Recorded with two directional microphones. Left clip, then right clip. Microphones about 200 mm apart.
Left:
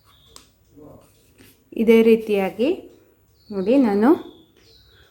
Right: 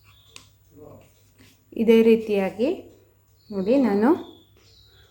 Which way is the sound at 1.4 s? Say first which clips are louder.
Left 3 dB; 15° left (ahead or behind).